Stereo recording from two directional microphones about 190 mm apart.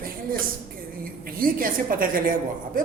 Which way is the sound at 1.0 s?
50° right (ahead or behind).